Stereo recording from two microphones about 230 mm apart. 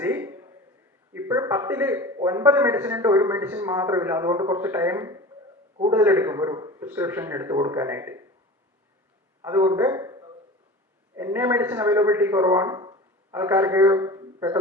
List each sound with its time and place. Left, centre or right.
0.0 s a sound: centre
1.1 s a man's voice: centre
9.4 s a man's voice: centre